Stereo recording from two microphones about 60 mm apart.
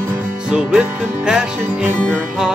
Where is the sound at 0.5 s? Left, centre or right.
Centre.